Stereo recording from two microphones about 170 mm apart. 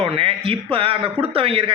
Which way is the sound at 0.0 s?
35° right (ahead or behind).